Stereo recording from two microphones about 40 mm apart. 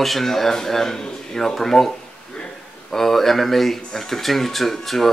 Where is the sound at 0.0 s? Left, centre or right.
Centre.